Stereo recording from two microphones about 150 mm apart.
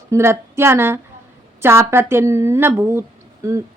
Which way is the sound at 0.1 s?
15° right (ahead or behind).